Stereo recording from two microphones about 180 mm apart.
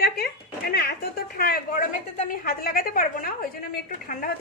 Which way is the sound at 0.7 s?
65° left (ahead or behind).